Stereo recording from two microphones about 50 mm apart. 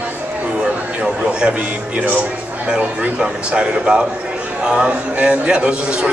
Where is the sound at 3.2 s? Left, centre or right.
Centre.